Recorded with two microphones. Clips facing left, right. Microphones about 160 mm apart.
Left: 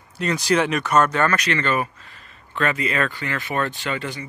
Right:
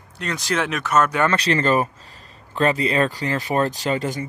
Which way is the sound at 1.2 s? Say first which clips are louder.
Right 3 dB; 30° right (ahead or behind).